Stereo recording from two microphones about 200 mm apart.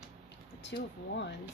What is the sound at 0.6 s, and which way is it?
Speech, 60° left (ahead or behind).